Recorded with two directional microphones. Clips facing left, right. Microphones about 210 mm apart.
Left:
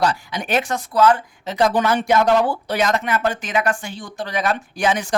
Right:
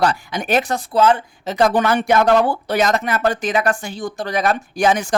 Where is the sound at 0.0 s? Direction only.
55° right (ahead or behind); by 1.2 s 25° right (ahead or behind).